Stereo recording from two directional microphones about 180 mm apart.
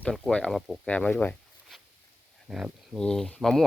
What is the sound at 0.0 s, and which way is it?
Speech, 5° left (ahead or behind).